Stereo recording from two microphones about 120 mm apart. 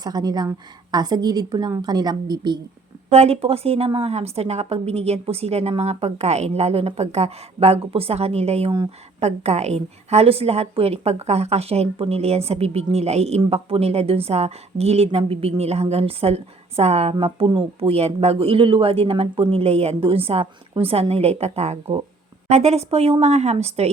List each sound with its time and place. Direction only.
0.0 s a woman's voice: 35° right (ahead or behind)
3.1 s a woman's voice: 60° right (ahead or behind)